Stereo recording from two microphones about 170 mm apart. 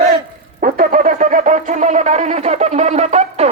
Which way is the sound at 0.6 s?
55° right (ahead or behind).